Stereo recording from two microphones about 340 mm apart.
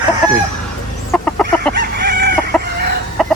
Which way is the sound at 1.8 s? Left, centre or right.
Right.